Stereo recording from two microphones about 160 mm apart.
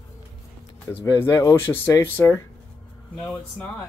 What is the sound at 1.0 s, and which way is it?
Speech, 25° left (ahead or behind).